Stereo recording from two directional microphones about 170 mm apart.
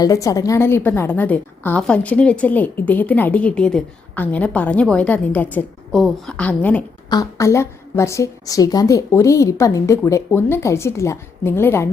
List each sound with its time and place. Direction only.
0.0 s a woman's voice: 20° left (ahead or behind)
7.1 s a woman's voice: 20° left (ahead or behind)